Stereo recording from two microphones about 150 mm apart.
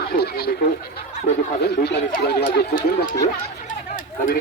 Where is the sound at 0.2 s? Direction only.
90° left.